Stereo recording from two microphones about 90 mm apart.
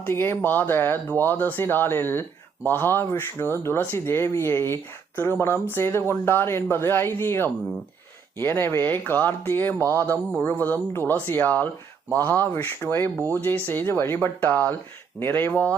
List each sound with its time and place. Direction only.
0.0 s speech: 25° left (ahead or behind)